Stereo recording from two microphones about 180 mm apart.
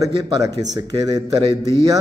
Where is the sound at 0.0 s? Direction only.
25° right (ahead or behind).